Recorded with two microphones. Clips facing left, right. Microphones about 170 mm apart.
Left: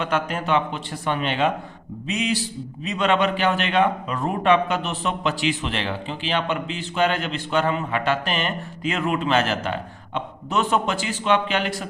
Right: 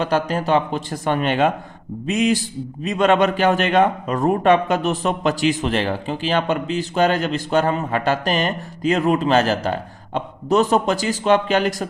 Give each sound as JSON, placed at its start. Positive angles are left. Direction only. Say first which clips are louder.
{"t": 0.0, "sound": "a man's voice", "louder": "right 4 dB", "side_deg": -35}